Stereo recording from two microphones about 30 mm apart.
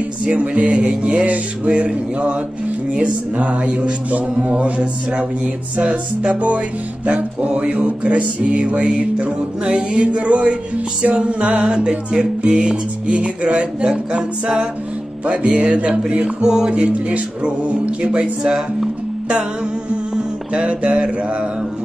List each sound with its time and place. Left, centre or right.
0.2 s music: right
1.2 s speech: right
1.7 s music: right
2.9 s speech: right
7.4 s music: right
16.3 s music: right
16.7 s speech: right
20.5 s music: right